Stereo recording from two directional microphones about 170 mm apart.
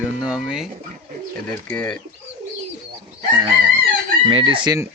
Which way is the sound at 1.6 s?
5° left (ahead or behind).